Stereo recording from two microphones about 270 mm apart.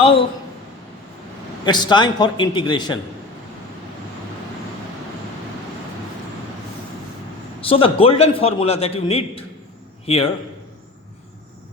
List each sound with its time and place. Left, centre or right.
0.0 s a sound: left
1.6 s a man's voice: centre
7.6 s a man's voice: centre